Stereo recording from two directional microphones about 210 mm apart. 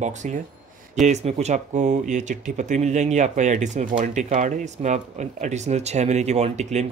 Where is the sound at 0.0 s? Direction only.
35° right (ahead or behind).